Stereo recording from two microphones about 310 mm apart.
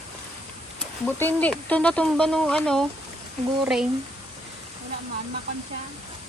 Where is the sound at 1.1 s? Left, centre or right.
Centre.